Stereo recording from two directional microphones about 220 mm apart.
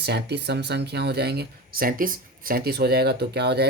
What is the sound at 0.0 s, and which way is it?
Speech, 50° right (ahead or behind).